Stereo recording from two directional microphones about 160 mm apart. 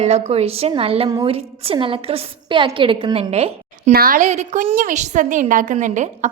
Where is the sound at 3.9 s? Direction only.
65° right (ahead or behind); by 6.3 s 50° right (ahead or behind).